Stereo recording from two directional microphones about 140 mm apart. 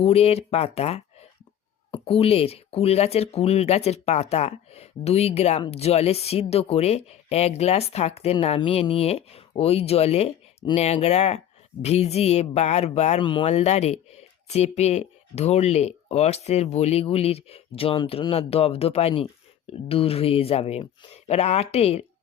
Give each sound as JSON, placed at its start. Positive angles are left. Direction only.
{"t": 0.0, "sound": "speech", "side_deg": 45}
{"t": 13.1, "sound": "speech", "side_deg": 35}
{"t": 13.4, "sound": "speech", "side_deg": 50}